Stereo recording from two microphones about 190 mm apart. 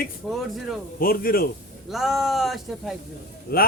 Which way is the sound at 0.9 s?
50° left (ahead or behind).